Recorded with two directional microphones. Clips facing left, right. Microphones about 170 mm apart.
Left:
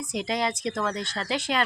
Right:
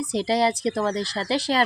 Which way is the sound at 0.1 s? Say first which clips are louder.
Right 6 dB; 35° right (ahead or behind).